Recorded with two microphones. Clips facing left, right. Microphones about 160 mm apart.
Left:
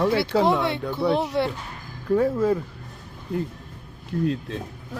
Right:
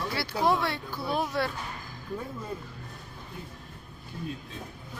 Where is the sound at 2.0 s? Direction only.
80° left.